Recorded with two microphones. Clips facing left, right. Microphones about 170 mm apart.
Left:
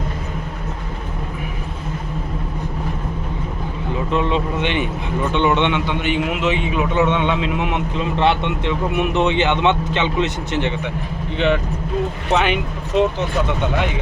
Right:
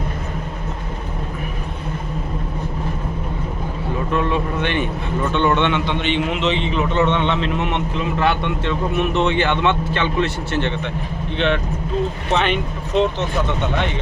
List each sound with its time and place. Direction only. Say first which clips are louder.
4.1 s a man's voice: left 1 dB; 20° left (ahead or behind)
8.1 s speech: left 2 dB; 25° left (ahead or behind)
8.6 s a man's voice: even; 15° left (ahead or behind)